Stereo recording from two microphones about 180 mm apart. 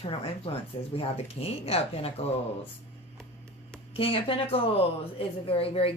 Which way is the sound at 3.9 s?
30° left (ahead or behind).